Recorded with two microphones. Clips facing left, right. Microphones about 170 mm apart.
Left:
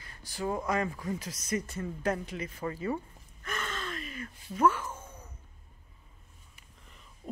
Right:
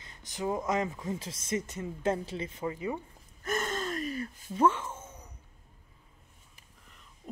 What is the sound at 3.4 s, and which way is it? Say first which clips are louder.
Gasp: right 5 dB; 45° right (ahead or behind).